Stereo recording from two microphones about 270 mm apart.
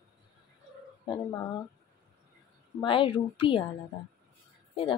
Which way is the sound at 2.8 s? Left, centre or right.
Centre.